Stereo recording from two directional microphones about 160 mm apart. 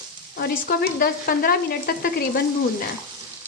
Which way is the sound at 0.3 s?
80° left.